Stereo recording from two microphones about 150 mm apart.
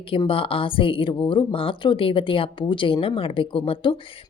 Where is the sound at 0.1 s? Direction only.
35° left (ahead or behind).